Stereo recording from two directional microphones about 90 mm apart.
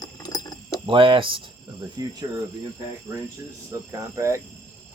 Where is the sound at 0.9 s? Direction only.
75° right (ahead or behind).